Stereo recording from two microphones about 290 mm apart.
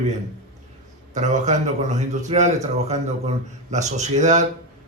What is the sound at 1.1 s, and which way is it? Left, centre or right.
Speech, right.